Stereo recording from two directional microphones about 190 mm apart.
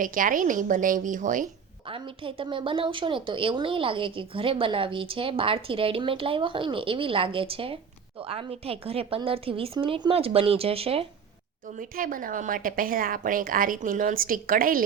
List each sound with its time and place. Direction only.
0.0 s a woman's voice: 45° right (ahead or behind)
1.9 s a woman's voice: 25° right (ahead or behind)
11.8 s a woman's voice: 45° right (ahead or behind)